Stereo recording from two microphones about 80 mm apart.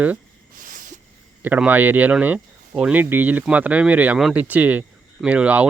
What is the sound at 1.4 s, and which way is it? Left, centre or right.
Speech, right.